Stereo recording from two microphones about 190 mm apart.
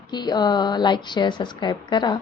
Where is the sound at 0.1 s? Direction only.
20° left (ahead or behind).